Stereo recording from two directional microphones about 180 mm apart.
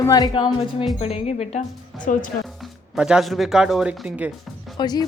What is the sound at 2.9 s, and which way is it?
Speech, 5° right (ahead or behind).